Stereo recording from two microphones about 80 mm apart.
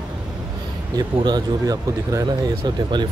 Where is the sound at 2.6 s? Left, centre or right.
Right.